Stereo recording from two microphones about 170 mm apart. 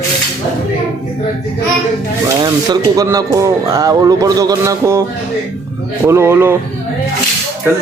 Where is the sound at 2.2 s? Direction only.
20° right (ahead or behind).